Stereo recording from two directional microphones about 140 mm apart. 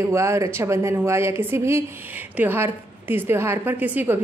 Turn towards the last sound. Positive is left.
turn(degrees=-15)  # may be behind; listen again after turning